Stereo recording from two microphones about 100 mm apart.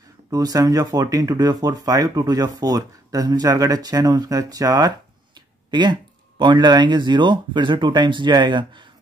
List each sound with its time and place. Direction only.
0.3 s speech: 40° right (ahead or behind)